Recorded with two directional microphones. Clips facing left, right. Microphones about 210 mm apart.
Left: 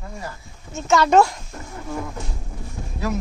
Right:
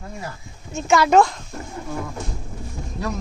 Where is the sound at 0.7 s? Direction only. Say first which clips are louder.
Right 1 dB; 10° right (ahead or behind).